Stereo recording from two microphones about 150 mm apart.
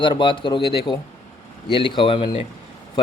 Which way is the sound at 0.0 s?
30° left (ahead or behind).